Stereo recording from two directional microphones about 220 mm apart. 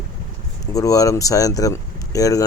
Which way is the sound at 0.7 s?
15° left (ahead or behind).